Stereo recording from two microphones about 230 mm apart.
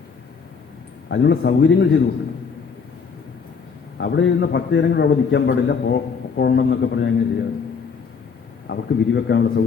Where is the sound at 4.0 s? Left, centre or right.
Left.